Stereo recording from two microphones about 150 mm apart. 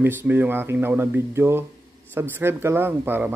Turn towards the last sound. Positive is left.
turn(degrees=-15)  # may be behind; listen again after turning